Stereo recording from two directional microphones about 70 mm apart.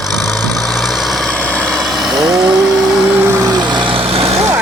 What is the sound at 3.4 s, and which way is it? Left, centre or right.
Vehicle, right.